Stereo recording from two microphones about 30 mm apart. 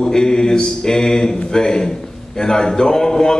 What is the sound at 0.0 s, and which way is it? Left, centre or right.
A man's voice, left.